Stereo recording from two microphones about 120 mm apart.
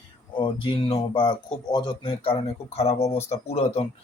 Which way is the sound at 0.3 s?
45° left (ahead or behind).